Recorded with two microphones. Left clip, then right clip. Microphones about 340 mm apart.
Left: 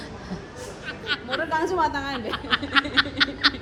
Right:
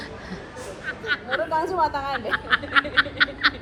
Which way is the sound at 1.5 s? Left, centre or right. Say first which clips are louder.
Even; left.